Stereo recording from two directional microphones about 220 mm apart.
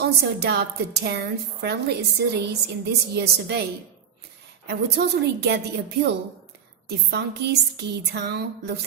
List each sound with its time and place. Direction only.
0.0 s a woman's voice: 45° right (ahead or behind)
4.7 s a woman's voice: 50° right (ahead or behind)
6.8 s a woman's voice: 50° right (ahead or behind)